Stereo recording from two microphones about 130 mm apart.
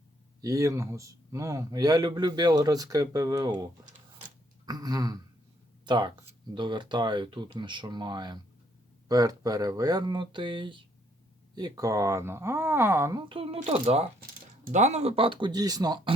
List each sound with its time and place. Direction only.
0.4 s speech: 25° right (ahead or behind)
13.2 s speech: 45° right (ahead or behind)
14.6 s speech: 65° right (ahead or behind); by 16.1 s 30° right (ahead or behind)